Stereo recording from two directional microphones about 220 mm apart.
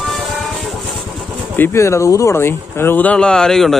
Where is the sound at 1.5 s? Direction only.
10° left (ahead or behind).